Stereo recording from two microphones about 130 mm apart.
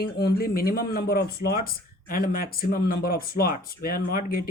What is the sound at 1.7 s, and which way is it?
Speech, 90° left.